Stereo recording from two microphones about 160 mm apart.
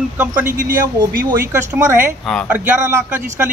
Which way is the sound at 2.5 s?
15° right (ahead or behind).